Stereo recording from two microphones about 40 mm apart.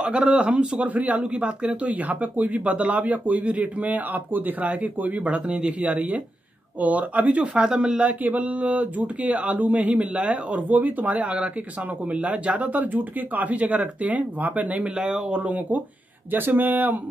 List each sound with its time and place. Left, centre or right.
0.0 s speech: right
1.9 s speech: right
7.5 s speech: right
8.0 s speech: right
10.7 s speech: right
15.1 s speech: right
16.3 s speech: right